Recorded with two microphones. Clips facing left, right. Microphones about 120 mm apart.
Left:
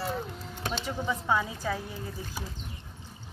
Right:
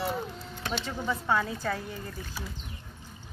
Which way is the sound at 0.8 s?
10° left (ahead or behind).